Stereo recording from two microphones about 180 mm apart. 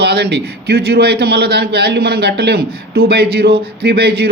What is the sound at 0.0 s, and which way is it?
Speech, 65° right (ahead or behind).